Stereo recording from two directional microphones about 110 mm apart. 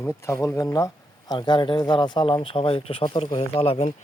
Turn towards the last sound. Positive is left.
turn(degrees=65)  # may be behind; listen again after turning